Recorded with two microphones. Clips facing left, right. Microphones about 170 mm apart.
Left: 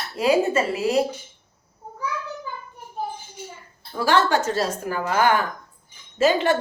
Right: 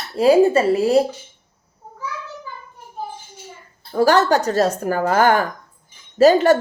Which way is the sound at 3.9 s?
45° right (ahead or behind).